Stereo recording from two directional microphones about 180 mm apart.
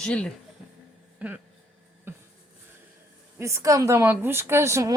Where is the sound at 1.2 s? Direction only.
5° right (ahead or behind).